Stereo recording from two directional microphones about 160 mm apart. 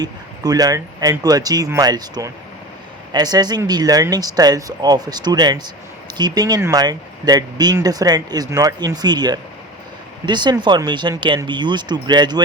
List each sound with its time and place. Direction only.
0.0 s speech: 25° right (ahead or behind)